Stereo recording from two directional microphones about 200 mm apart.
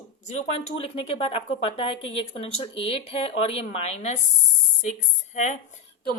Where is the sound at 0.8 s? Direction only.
30° left (ahead or behind).